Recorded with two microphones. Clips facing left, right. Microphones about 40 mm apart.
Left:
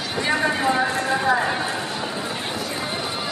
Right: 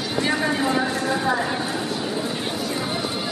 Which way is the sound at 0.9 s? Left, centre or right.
Centre.